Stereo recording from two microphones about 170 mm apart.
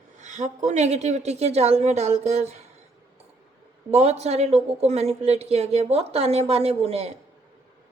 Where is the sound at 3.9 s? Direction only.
40° right (ahead or behind).